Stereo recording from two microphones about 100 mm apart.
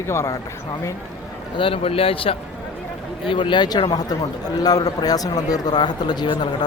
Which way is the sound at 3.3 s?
55° left (ahead or behind).